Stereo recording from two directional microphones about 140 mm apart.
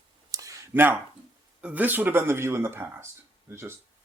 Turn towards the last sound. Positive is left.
turn(degrees=-20)  # may be behind; listen again after turning